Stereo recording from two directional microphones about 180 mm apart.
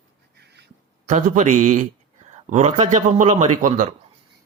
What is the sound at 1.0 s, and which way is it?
A man's voice, 45° right (ahead or behind).